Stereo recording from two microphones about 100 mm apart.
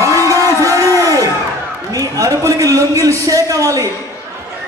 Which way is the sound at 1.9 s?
35° right (ahead or behind).